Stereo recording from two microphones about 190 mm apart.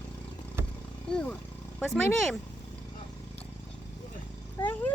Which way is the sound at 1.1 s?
5° left (ahead or behind).